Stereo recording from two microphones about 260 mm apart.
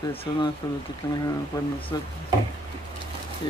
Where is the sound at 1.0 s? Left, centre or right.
Centre.